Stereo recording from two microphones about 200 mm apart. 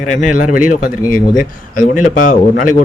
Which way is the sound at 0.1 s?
40° left (ahead or behind).